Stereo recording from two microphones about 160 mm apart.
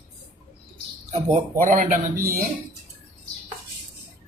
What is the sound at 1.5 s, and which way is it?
Speech, 55° right (ahead or behind).